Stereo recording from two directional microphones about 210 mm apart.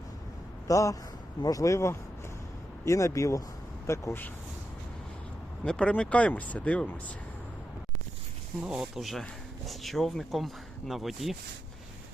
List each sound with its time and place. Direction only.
0.7 s speech: 15° left (ahead or behind)
5.6 s speech: 5° left (ahead or behind)
8.6 s speech: 5° right (ahead or behind)